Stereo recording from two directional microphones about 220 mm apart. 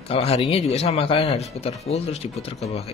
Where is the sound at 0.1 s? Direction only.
30° left (ahead or behind).